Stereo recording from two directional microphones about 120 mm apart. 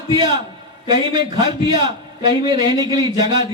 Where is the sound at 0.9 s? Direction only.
40° right (ahead or behind).